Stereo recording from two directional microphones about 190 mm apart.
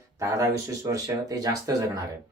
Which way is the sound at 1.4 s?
20° right (ahead or behind).